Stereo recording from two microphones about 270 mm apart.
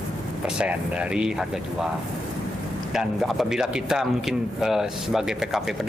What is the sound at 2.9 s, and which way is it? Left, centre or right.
A man's voice, centre.